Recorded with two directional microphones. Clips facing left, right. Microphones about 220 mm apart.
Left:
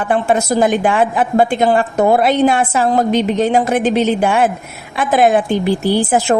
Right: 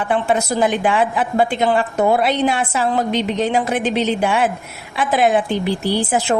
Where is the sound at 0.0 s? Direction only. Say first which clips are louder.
Left 3 dB; 45° left (ahead or behind).